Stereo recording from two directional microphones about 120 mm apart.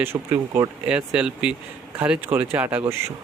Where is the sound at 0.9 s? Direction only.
10° right (ahead or behind).